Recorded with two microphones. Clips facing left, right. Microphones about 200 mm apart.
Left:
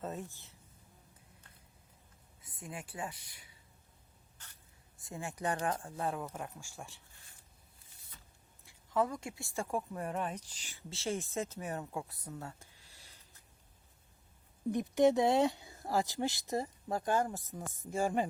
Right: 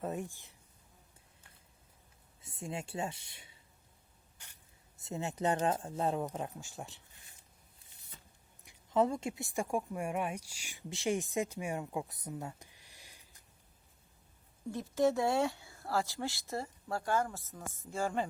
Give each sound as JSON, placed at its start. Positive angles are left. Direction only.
{"t": 0.0, "sound": "speech", "side_deg": -15}
{"t": 2.4, "sound": "speech", "side_deg": -25}
{"t": 4.4, "sound": "spray", "side_deg": -10}
{"t": 4.9, "sound": "speech", "side_deg": -25}
{"t": 8.6, "sound": "speech", "side_deg": -20}
{"t": 14.7, "sound": "speech", "side_deg": 20}